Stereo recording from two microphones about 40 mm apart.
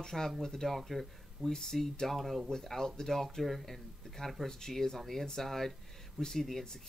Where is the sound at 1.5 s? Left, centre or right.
Centre.